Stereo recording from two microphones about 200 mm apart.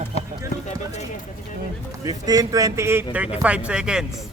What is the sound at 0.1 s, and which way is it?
Run, 30° left (ahead or behind).